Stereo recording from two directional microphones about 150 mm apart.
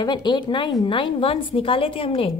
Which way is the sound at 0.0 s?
30° left (ahead or behind).